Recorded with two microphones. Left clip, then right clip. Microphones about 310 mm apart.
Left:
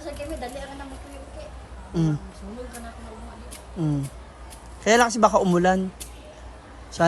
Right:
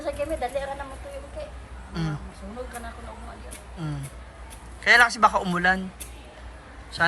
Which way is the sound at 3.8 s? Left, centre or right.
Left.